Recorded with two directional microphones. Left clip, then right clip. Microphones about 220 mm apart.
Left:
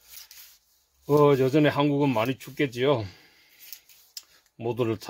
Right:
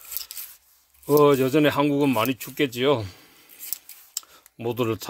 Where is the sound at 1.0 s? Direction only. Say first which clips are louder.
Right 2 dB; 20° right (ahead or behind).